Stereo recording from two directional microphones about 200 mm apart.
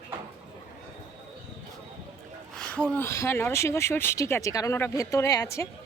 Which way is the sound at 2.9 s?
10° left (ahead or behind).